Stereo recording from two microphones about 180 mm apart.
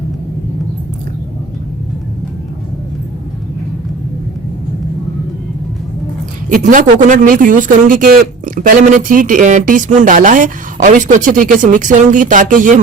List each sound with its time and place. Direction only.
6.5 s speech: 45° right (ahead or behind)